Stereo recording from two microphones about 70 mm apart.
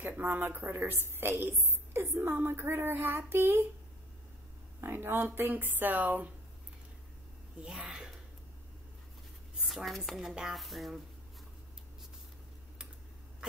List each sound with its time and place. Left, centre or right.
0.2 s speech: right
4.7 s speech: right
7.6 s speech: centre
9.6 s speech: centre
10.3 s dishes: centre